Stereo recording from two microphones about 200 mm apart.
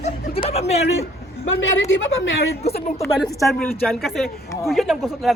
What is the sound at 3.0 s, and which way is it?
Speech, centre (ahead or behind).